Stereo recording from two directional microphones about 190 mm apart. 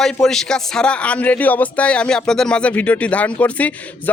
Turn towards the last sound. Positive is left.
turn(degrees=10)  # may be behind; listen again after turning